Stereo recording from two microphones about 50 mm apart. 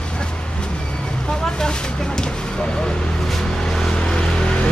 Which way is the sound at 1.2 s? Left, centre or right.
Centre.